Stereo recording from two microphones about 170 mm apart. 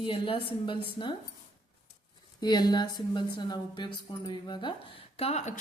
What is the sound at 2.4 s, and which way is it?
Speech, 25° left (ahead or behind).